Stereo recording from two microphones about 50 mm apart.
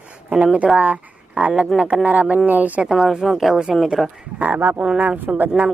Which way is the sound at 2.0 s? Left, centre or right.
Right.